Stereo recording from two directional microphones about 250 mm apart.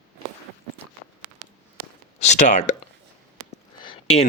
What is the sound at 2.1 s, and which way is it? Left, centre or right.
Speech, left.